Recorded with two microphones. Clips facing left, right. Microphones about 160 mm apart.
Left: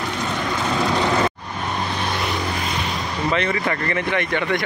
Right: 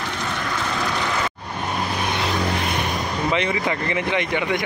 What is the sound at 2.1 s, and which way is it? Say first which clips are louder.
Vehicle: right 1 dB; 20° right (ahead or behind).